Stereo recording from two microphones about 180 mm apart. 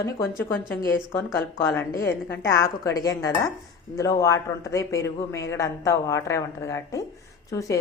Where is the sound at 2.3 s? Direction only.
15° left (ahead or behind).